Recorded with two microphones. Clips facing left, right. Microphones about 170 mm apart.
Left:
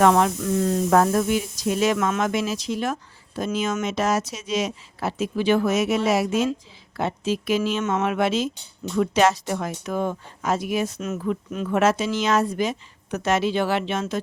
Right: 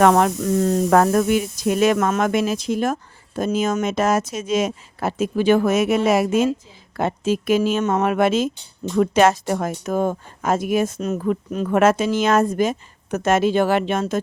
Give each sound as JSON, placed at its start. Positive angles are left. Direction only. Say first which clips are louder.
{"t": 0.0, "sound": "speech", "louder": "right 3 dB", "side_deg": -50}
{"t": 0.9, "sound": "speech", "louder": "right 3 dB", "side_deg": -60}